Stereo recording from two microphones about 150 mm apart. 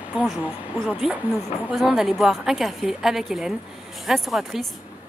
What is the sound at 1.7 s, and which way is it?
A woman's voice, 5° right (ahead or behind).